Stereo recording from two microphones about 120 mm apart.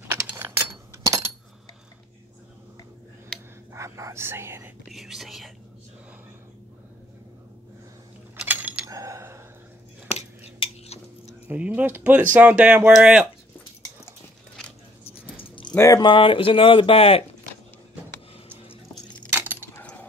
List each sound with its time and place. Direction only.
0.4 s a sound: 20° right (ahead or behind)
3.7 s speech: 25° right (ahead or behind)
4.8 s speech: centre (ahead or behind)
8.5 s a sound: 15° right (ahead or behind)
8.9 s a sound: 25° right (ahead or behind)
10.0 s cutlery: 60° left (ahead or behind)
11.4 s speech: 10° right (ahead or behind)
15.7 s speech: 25° left (ahead or behind)
16.0 s speech: 45° left (ahead or behind)
18.6 s music: 50° left (ahead or behind)
19.3 s keys jangling: 15° right (ahead or behind)
19.7 s a sound: 15° left (ahead or behind)